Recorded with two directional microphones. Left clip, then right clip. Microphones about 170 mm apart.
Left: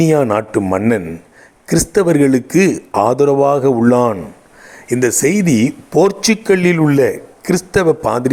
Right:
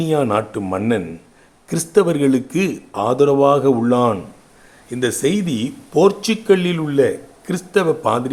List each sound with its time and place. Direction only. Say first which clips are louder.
0.1 s speech: left 4 dB; 35° left (ahead or behind)
1.6 s speech: left 3 dB; 30° left (ahead or behind)